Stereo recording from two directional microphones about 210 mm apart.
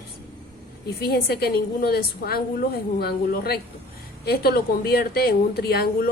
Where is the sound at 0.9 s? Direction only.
50° left (ahead or behind).